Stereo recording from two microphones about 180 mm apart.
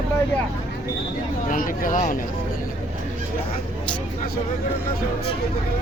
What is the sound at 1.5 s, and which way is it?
Speech, 45° left (ahead or behind).